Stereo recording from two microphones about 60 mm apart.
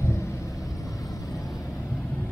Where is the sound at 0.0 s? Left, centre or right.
Left.